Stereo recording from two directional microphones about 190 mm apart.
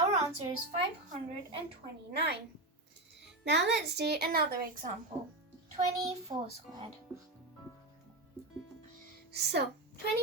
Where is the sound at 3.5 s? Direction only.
65° right (ahead or behind).